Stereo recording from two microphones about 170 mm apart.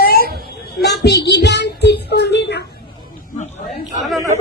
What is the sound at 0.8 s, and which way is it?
Child singing, 75° left (ahead or behind).